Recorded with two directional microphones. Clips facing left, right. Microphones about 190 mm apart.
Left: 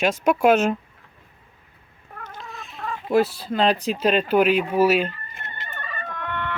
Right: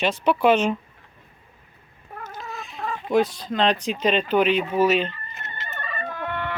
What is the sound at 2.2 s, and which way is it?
Speech, 5° right (ahead or behind).